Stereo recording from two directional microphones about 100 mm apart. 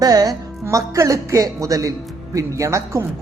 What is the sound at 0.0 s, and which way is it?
A man's voice, 40° right (ahead or behind).